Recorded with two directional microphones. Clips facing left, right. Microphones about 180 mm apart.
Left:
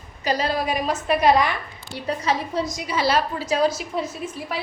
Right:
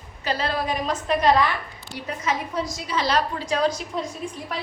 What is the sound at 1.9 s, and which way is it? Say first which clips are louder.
Speech: left 3 dB; 35° left (ahead or behind).